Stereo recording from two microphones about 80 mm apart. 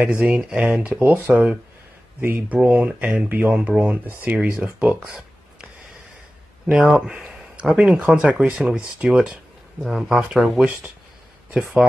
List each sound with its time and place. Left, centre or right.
0.0 s speech: right
4.6 s speech: centre
6.7 s speech: centre
10.6 s speech: centre